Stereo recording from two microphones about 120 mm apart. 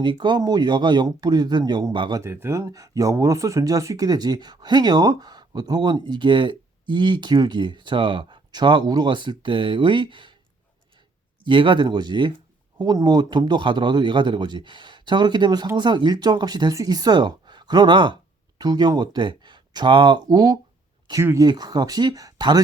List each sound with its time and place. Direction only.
0.0 s speech: 40° right (ahead or behind)
2.2 s speech: 20° right (ahead or behind); by 10.3 s 40° right (ahead or behind)
11.4 s speech: 45° right (ahead or behind)